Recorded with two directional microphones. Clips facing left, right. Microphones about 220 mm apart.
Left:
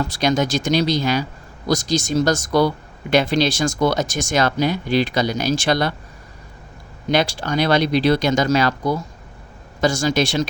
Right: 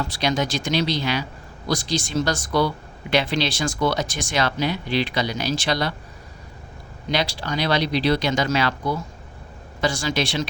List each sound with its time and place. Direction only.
0.0 s speech: 45° left (ahead or behind)
7.1 s speech: 50° left (ahead or behind)